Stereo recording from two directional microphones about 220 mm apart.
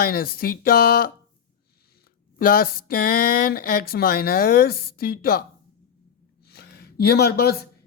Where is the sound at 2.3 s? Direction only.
40° left (ahead or behind).